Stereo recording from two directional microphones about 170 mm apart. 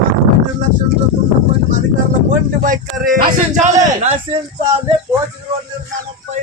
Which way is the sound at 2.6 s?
55° right (ahead or behind).